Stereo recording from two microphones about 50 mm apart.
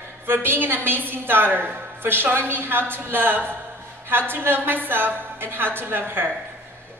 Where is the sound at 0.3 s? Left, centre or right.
Right.